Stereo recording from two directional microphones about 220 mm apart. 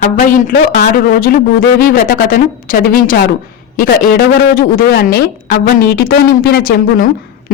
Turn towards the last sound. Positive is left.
turn(degrees=40)  # may be behind; listen again after turning